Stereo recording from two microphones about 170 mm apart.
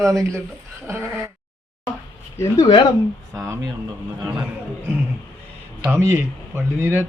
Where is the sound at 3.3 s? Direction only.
20° right (ahead or behind).